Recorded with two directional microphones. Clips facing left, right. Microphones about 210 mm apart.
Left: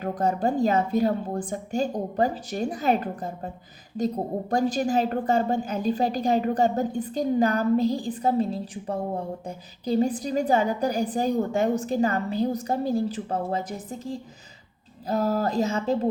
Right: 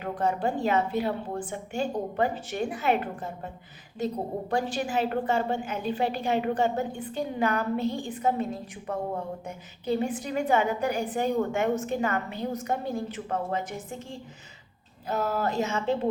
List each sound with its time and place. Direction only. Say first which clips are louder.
0.0 s a woman's voice: left 3 dB; 40° left (ahead or behind)